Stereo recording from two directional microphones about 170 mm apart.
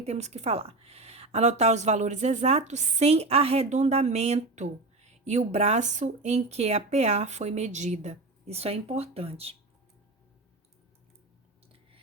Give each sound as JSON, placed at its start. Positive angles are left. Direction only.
{"t": 0.0, "sound": "a woman's voice", "side_deg": -40}